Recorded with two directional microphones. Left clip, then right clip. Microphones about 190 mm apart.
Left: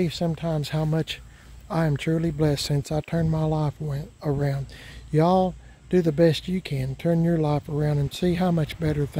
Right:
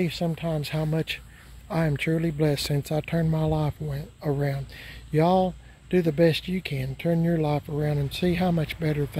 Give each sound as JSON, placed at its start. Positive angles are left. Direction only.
{"t": 0.0, "sound": "speech", "side_deg": 20}
{"t": 1.9, "sound": "speech", "side_deg": 10}